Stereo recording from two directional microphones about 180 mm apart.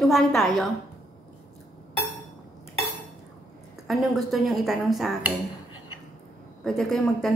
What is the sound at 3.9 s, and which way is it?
A woman's voice, centre (ahead or behind).